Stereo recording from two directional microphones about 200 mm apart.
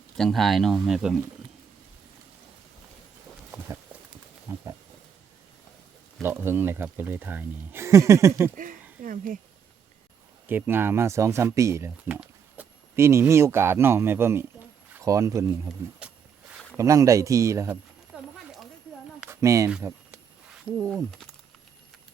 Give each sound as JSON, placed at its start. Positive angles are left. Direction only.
{"t": 0.2, "sound": "speech", "side_deg": 0}
{"t": 3.5, "sound": "clip-clop", "side_deg": -5}
{"t": 4.5, "sound": "wild animals", "side_deg": -10}
{"t": 6.2, "sound": "speech", "side_deg": -10}
{"t": 8.5, "sound": "speech", "side_deg": -40}
{"t": 10.4, "sound": "speech", "side_deg": -10}
{"t": 16.7, "sound": "a sound", "side_deg": -15}
{"t": 19.2, "sound": "a sound", "side_deg": -15}
{"t": 20.9, "sound": "speech", "side_deg": 0}